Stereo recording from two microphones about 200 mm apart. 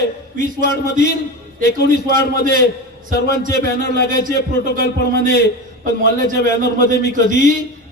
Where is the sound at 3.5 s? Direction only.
55° left (ahead or behind).